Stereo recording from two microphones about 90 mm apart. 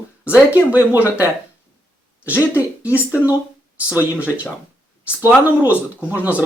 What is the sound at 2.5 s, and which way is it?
Speech, 20° right (ahead or behind).